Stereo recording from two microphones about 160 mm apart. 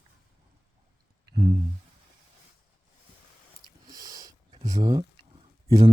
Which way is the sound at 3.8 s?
25° right (ahead or behind).